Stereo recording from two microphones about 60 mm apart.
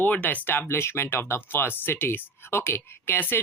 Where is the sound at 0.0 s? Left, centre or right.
Left.